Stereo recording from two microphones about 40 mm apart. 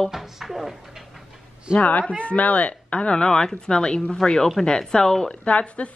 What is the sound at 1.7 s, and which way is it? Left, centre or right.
A woman's voice, left.